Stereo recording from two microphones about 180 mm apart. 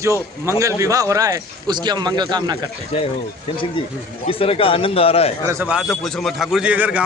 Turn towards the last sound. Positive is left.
turn(degrees=-10)  # may be behind; listen again after turning